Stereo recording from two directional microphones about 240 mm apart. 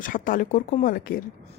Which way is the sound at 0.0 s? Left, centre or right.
Left.